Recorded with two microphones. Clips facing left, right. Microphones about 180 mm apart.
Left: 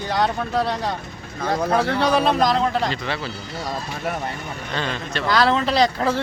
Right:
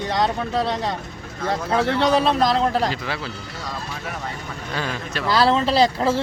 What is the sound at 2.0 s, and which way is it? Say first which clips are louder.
Speech: right 3 dB; 25° right (ahead or behind).